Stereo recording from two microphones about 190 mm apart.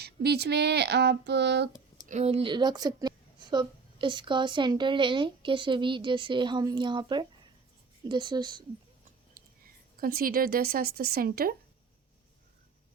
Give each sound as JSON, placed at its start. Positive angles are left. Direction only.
{"t": 0.0, "sound": "a sound", "side_deg": -60}
{"t": 2.0, "sound": "speech", "side_deg": -35}
{"t": 10.0, "sound": "speech", "side_deg": -50}